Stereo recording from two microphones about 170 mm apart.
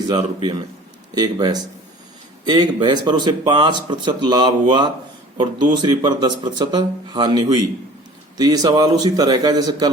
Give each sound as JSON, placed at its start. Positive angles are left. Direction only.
{"t": 1.1, "sound": "speech", "side_deg": -25}